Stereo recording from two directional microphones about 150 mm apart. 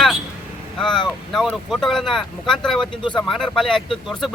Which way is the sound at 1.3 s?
Centre (ahead or behind).